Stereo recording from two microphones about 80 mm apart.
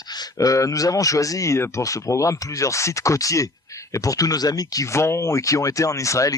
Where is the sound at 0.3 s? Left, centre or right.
Left.